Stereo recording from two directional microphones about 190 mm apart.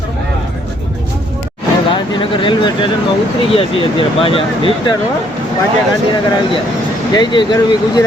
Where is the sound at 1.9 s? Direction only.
25° left (ahead or behind).